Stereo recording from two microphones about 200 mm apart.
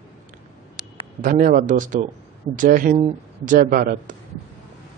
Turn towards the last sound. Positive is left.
turn(degrees=-45)  # may be behind; listen again after turning